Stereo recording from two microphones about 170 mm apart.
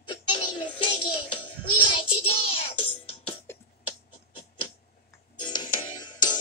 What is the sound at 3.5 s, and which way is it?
Beatboxing, 15° left (ahead or behind).